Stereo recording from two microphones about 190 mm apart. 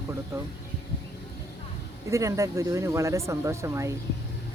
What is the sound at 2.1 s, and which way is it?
Speech, 15° right (ahead or behind).